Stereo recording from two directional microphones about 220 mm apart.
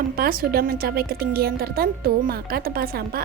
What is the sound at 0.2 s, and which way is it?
A woman's voice, 45° right (ahead or behind).